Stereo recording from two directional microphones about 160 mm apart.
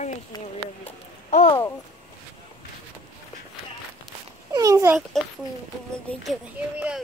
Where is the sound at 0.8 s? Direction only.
50° left (ahead or behind).